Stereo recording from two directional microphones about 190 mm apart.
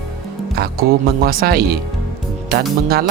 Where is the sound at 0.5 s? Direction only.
55° right (ahead or behind).